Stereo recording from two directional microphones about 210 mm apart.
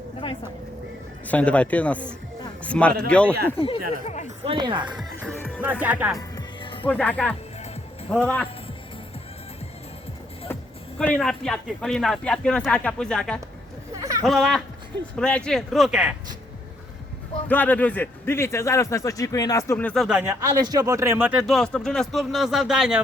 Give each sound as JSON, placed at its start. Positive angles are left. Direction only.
{"t": 1.3, "sound": "a man's voice", "side_deg": 5}
{"t": 4.4, "sound": "speech", "side_deg": -25}
{"t": 5.2, "sound": "music", "side_deg": 5}
{"t": 5.5, "sound": "speech", "side_deg": -10}
{"t": 6.1, "sound": "music", "side_deg": 20}
{"t": 6.8, "sound": "a man's voice", "side_deg": 5}
{"t": 10.5, "sound": "a man's voice", "side_deg": 5}
{"t": 13.9, "sound": "a sound", "side_deg": -15}
{"t": 14.3, "sound": "a man's voice", "side_deg": 0}
{"t": 17.5, "sound": "a man's voice", "side_deg": 10}